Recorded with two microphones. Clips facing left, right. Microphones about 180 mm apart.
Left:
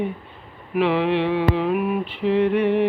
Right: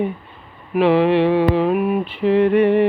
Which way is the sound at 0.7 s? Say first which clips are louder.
Right 5 dB; 40° right (ahead or behind).